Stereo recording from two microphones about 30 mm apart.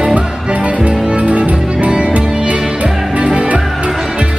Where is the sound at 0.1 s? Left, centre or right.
Right.